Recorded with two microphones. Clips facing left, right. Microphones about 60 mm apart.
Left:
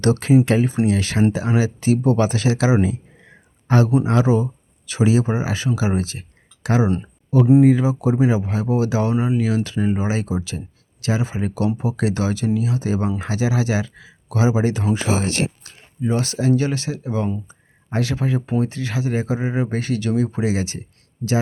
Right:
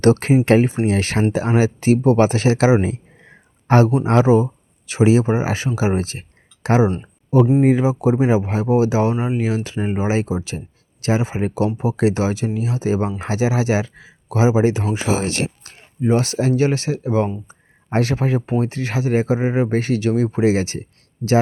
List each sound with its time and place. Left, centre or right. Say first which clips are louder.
0.0 s speech: right 1 dB; right
7.0 s a sound: right 3 dB; right
7.6 s speech: even; right
16.0 s speech: right 4 dB; right